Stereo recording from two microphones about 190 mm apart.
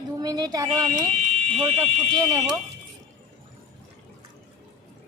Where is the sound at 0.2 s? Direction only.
20° right (ahead or behind).